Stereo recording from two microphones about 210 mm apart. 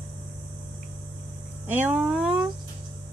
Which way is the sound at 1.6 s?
10° right (ahead or behind).